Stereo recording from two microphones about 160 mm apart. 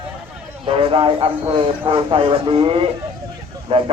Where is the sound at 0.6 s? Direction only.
35° right (ahead or behind).